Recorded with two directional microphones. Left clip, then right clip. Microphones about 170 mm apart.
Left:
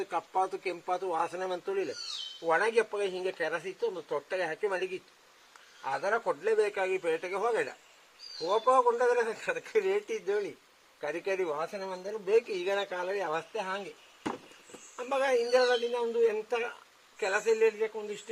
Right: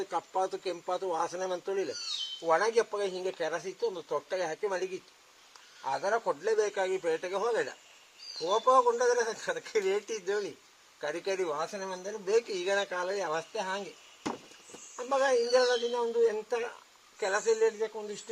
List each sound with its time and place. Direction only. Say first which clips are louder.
0.0 s speech: left 1 dB; 20° left (ahead or behind); by 13.8 s 5° left (ahead or behind)
14.9 s speech: right 1 dB; 15° left (ahead or behind)